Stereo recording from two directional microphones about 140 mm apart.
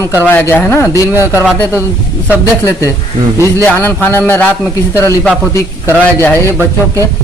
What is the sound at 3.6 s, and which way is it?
A man's voice, 10° left (ahead or behind).